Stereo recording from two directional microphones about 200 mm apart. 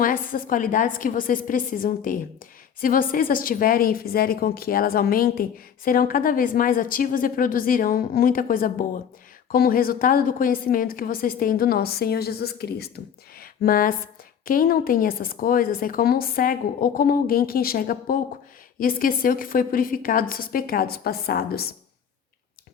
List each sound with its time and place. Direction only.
0.0 s a woman's voice: 45° left (ahead or behind)
13.4 s a sound: 45° left (ahead or behind)
14.4 s a woman's voice: 45° left (ahead or behind)